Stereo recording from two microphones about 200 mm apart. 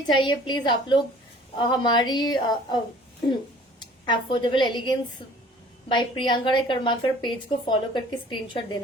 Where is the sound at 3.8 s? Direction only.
25° left (ahead or behind).